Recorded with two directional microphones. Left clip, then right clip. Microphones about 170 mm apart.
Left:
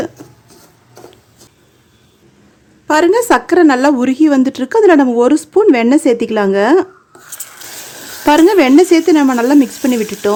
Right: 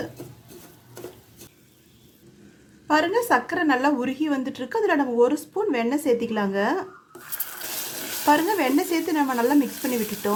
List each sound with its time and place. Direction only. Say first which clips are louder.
2.8 s a woman's voice: left 11 dB; 55° left (ahead or behind)
8.2 s speech: left 12 dB; 45° left (ahead or behind)